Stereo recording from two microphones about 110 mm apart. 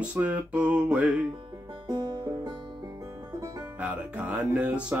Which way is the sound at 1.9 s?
40° right (ahead or behind).